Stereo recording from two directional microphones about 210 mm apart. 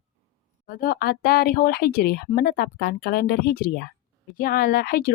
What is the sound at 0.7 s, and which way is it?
Speech, 45° left (ahead or behind).